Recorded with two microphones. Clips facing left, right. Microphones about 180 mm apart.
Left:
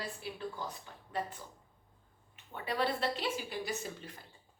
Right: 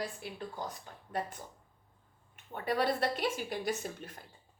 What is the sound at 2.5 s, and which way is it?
Speech, 45° right (ahead or behind).